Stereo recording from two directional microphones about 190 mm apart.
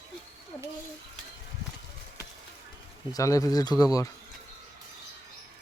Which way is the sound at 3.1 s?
15° left (ahead or behind).